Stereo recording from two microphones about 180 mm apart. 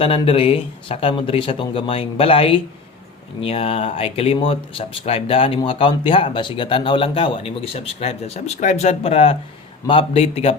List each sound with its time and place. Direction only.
0.0 s speech: 30° left (ahead or behind)